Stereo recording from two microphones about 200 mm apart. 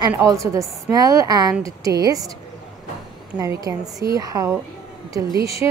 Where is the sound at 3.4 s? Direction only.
15° right (ahead or behind).